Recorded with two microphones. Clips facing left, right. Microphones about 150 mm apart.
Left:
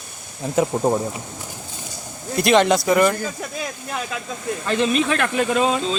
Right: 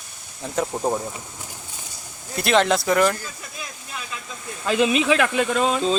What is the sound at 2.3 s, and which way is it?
Speech, centre (ahead or behind).